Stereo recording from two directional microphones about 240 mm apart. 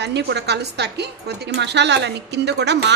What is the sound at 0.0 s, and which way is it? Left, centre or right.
A woman's voice, right.